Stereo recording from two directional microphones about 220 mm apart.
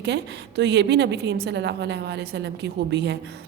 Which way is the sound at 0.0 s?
50° right (ahead or behind).